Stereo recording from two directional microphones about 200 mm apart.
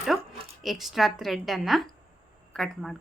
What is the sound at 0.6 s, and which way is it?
A woman's voice, centre (ahead or behind).